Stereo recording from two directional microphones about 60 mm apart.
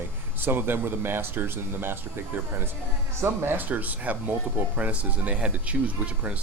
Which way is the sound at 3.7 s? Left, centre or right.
Right.